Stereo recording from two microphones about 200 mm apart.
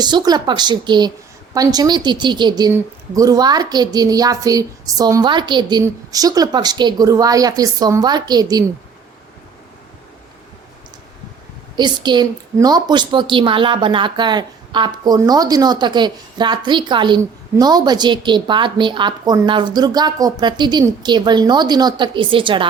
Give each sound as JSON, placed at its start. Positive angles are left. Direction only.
{"t": 0.0, "sound": "a woman's voice", "side_deg": -20}
{"t": 11.8, "sound": "a woman's voice", "side_deg": -20}